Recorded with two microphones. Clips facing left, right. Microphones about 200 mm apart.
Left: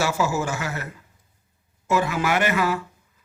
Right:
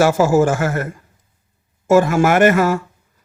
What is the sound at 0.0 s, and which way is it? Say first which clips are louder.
A man's voice: right 10 dB; 50° right (ahead or behind).